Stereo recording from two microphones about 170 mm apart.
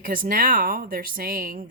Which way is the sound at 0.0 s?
55° right (ahead or behind).